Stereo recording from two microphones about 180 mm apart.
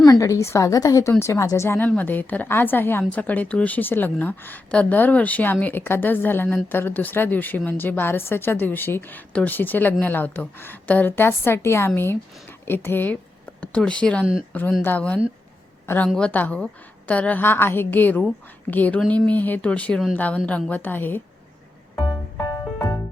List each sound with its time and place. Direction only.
0.0 s a woman's voice: 20° left (ahead or behind)
21.9 s music: 20° left (ahead or behind)